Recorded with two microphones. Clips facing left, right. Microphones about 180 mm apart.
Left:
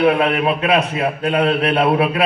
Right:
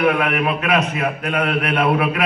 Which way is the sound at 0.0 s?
30° left (ahead or behind).